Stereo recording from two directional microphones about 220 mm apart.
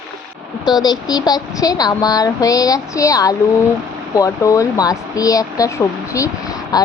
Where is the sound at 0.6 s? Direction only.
20° left (ahead or behind).